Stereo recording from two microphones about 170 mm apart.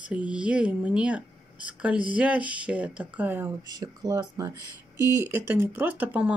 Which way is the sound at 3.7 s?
20° right (ahead or behind).